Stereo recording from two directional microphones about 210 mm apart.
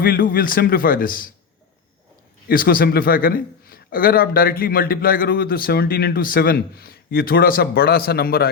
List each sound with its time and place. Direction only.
0.0 s a man's voice: 45° left (ahead or behind)
2.5 s a man's voice: 45° left (ahead or behind)